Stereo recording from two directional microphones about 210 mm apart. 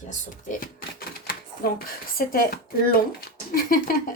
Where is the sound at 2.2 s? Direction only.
45° left (ahead or behind).